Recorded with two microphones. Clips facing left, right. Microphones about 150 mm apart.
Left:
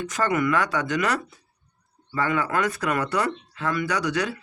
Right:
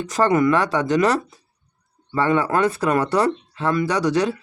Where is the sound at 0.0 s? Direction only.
35° right (ahead or behind).